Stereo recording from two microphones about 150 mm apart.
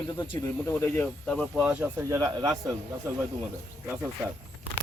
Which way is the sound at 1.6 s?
10° right (ahead or behind).